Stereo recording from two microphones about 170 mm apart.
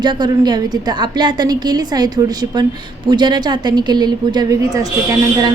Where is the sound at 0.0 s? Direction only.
25° right (ahead or behind).